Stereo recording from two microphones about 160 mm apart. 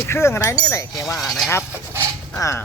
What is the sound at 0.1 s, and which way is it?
Speech, 15° left (ahead or behind).